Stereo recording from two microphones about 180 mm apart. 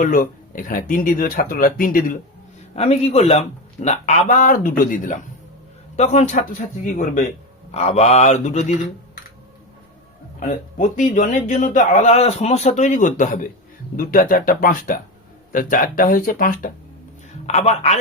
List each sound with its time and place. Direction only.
0.0 s speech: 50° left (ahead or behind)
2.7 s a man's voice: 35° left (ahead or behind)
10.4 s speech: 45° left (ahead or behind)
17.4 s a man's voice: 35° left (ahead or behind)